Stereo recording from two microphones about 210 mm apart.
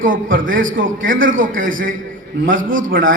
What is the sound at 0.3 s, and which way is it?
A man's voice, 40° right (ahead or behind).